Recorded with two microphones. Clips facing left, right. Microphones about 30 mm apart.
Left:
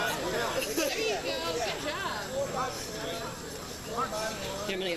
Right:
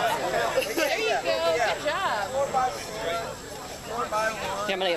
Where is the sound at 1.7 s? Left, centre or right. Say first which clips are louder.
Right 7 dB; right.